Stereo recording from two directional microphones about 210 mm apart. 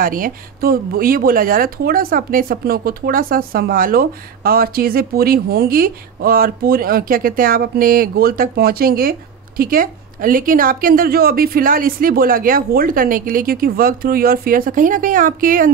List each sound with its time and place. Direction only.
0.0 s speech: 40° right (ahead or behind)